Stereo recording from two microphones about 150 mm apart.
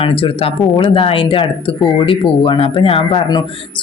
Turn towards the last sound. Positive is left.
turn(degrees=40)  # may be behind; listen again after turning